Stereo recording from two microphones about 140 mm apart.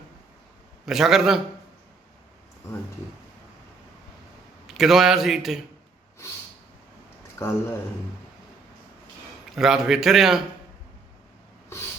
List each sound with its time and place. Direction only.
0.9 s a man's voice: centre (ahead or behind)
4.6 s a man's voice: centre (ahead or behind)
7.4 s speech: 20° left (ahead or behind)
9.6 s a man's voice: 5° right (ahead or behind)